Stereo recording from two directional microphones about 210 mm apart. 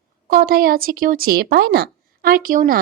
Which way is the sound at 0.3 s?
45° right (ahead or behind).